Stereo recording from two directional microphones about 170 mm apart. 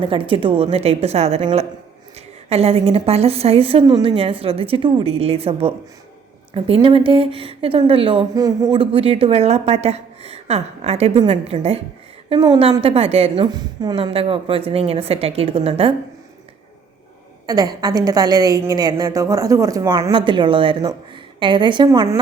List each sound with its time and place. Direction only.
0.0 s speech: 30° right (ahead or behind)
6.7 s speech: 30° right (ahead or behind)
17.4 s a woman's voice: 20° right (ahead or behind)